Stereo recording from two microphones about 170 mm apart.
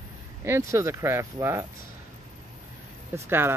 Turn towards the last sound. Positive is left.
turn(degrees=-15)  # may be behind; listen again after turning